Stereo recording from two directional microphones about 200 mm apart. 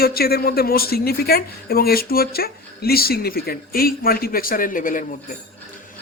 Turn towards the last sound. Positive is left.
turn(degrees=40)  # may be behind; listen again after turning